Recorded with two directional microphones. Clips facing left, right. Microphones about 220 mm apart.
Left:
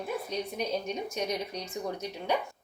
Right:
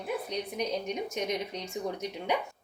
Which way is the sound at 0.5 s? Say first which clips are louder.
Right 2 dB; 20° right (ahead or behind).